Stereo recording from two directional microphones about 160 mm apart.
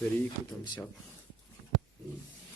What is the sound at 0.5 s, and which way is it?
Speech, 15° left (ahead or behind).